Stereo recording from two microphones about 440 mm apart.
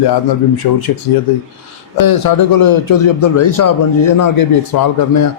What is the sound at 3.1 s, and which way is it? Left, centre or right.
Speech, left.